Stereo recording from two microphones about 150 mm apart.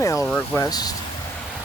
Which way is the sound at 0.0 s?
20° left (ahead or behind).